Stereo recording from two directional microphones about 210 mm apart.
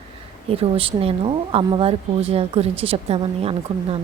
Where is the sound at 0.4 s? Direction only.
25° right (ahead or behind).